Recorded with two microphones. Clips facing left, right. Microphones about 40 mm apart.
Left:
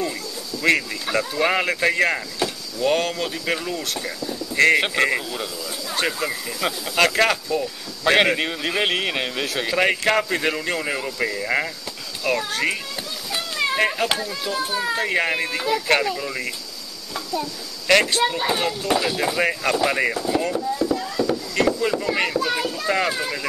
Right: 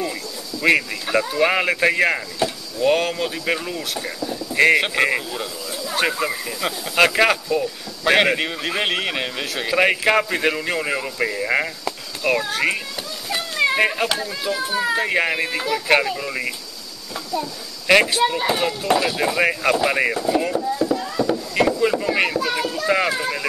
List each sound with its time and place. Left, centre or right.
0.6 s speech: centre
6.6 s speech: centre
7.0 s speech: centre
13.3 s a sound: centre
13.7 s speech: centre
17.8 s speech: centre
21.3 s chop: centre
21.8 s speech: centre